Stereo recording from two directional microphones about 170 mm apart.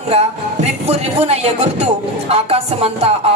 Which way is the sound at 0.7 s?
40° right (ahead or behind).